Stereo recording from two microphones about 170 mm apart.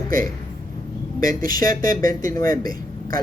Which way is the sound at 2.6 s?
55° right (ahead or behind).